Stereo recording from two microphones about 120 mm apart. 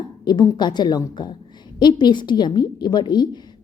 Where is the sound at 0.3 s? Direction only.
35° left (ahead or behind).